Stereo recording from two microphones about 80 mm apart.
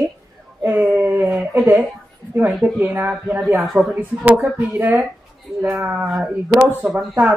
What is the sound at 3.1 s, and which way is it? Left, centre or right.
Speech, centre.